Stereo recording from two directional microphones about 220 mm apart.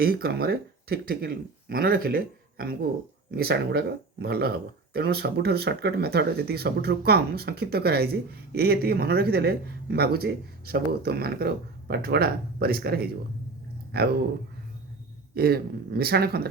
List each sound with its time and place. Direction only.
0.0 s speech: 45° right (ahead or behind)
15.4 s speech: 45° right (ahead or behind)